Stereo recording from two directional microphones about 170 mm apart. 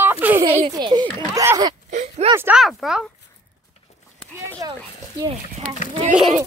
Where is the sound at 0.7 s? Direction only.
25° right (ahead or behind).